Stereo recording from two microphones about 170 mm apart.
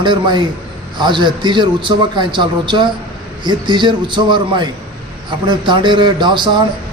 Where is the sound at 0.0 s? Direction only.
25° right (ahead or behind).